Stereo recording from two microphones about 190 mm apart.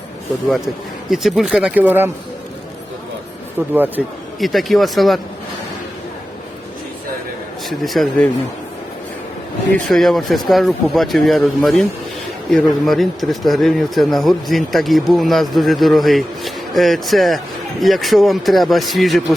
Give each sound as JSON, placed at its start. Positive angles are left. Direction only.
{"t": 0.4, "sound": "speech", "side_deg": 0}
{"t": 3.8, "sound": "speech", "side_deg": -10}
{"t": 7.7, "sound": "speech", "side_deg": 0}
{"t": 9.7, "sound": "speech", "side_deg": 0}